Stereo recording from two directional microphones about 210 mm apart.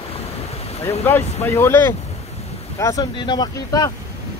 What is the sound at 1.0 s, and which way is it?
Speech, 10° left (ahead or behind).